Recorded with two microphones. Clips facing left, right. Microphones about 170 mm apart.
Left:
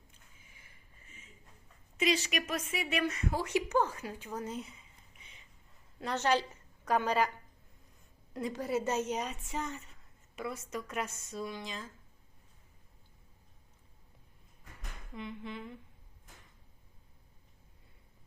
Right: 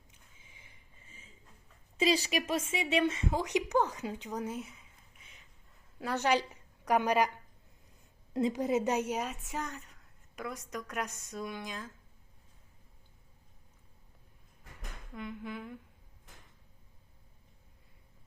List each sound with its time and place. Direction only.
0.5 s a sound: 20° right (ahead or behind)
2.0 s a woman's voice: 30° right (ahead or behind); by 4.5 s 15° right (ahead or behind)
4.5 s humming: centre (ahead or behind)
5.2 s a sound: centre (ahead or behind)
6.0 s a woman's voice: 10° right (ahead or behind)
8.3 s a woman's voice: 25° right (ahead or behind); by 11.1 s 5° left (ahead or behind)
11.3 s humming: centre (ahead or behind)
15.1 s humming: centre (ahead or behind)